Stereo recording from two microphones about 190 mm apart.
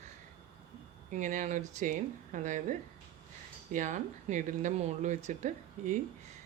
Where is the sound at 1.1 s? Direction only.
40° right (ahead or behind).